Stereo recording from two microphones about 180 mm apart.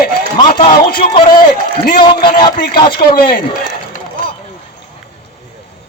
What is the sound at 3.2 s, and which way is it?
Speech, 55° left (ahead or behind).